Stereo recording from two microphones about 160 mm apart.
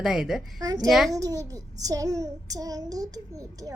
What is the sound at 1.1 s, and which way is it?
A child's voice, 20° right (ahead or behind).